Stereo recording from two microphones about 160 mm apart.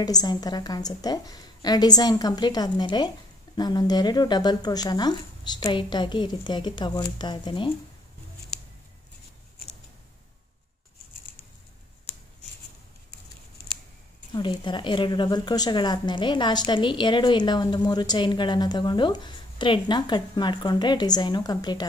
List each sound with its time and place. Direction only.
0.0 s speech: 25° left (ahead or behind)
14.3 s speech: 30° left (ahead or behind)